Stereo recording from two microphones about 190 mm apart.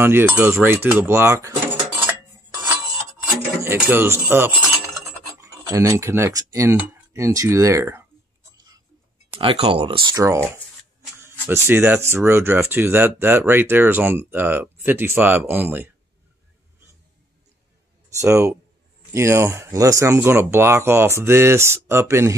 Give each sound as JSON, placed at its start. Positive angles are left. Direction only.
{"t": 0.0, "sound": "speech", "side_deg": -10}
{"t": 2.0, "sound": "cutlery", "side_deg": -10}
{"t": 3.6, "sound": "speech", "side_deg": -10}
{"t": 8.5, "sound": "a sound", "side_deg": -20}
{"t": 9.3, "sound": "speech", "side_deg": -30}
{"t": 18.2, "sound": "speech", "side_deg": -15}